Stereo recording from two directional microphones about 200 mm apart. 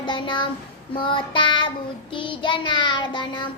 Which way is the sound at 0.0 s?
25° left (ahead or behind).